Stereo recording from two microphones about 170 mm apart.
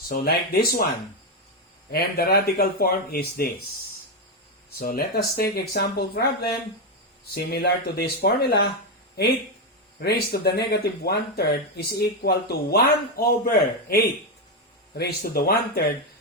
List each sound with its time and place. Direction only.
0.1 s speech: 65° left (ahead or behind)
1.9 s speech: 65° left (ahead or behind)
4.8 s speech: 60° left (ahead or behind)
7.3 s speech: 70° left (ahead or behind)
10.0 s speech: 70° left (ahead or behind)